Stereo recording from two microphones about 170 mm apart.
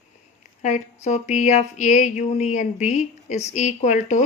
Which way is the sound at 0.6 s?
45° left (ahead or behind).